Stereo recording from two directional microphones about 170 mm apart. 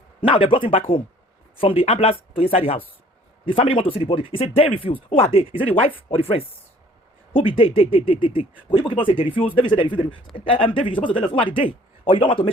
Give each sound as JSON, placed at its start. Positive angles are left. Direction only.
{"t": 0.3, "sound": "speech", "side_deg": 30}
{"t": 7.3, "sound": "speech", "side_deg": 30}